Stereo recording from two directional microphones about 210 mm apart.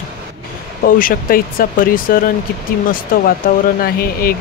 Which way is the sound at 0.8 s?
40° left (ahead or behind).